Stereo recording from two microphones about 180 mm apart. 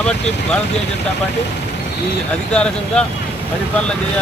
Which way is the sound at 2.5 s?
5° left (ahead or behind).